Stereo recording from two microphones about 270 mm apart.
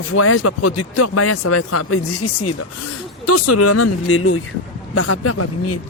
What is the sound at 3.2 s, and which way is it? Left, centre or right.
Speech, left.